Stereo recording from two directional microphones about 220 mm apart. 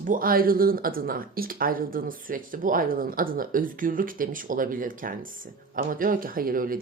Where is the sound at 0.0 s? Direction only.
40° right (ahead or behind).